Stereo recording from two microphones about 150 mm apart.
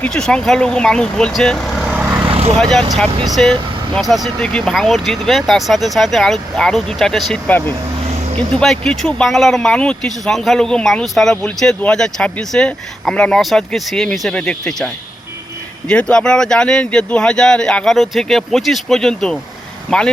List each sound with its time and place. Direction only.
0.0 s speech: 5° left (ahead or behind)
1.9 s vehicle: 10° right (ahead or behind)
2.2 s vehicle: 40° right (ahead or behind)
2.6 s speech: centre (ahead or behind)
15.9 s speech: 5° left (ahead or behind)